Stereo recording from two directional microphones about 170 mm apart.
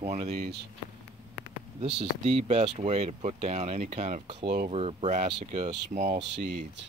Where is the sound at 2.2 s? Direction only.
40° right (ahead or behind).